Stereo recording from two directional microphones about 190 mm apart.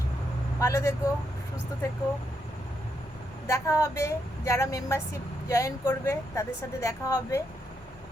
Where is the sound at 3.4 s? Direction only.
15° left (ahead or behind).